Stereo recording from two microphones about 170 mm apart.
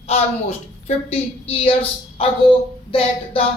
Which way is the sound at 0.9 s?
35° left (ahead or behind).